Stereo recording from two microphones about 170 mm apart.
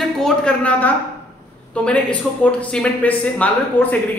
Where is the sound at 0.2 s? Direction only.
5° left (ahead or behind).